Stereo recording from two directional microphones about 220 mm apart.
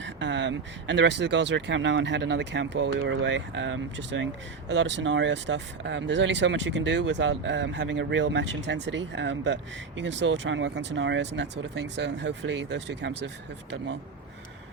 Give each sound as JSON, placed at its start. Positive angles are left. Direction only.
{"t": 0.0, "sound": "speech", "side_deg": -55}